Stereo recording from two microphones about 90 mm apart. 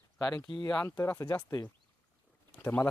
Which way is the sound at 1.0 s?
30° left (ahead or behind).